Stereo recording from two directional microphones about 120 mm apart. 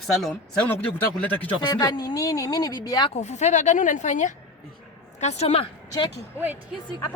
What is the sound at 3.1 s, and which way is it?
Speech, 80° left.